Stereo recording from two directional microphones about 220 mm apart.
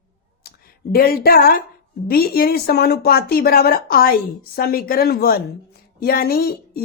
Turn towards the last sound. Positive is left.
turn(degrees=40)  # may be behind; listen again after turning